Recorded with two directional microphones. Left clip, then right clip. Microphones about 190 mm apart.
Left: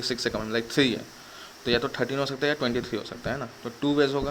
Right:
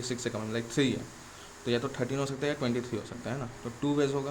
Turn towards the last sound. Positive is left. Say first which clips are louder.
# left 5 dB
turn(degrees=15)  # may be behind; listen again after turning